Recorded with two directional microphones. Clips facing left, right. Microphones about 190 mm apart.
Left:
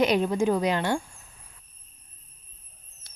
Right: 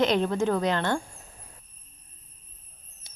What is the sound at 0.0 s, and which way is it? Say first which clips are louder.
Speech: left 1 dB; 15° left (ahead or behind).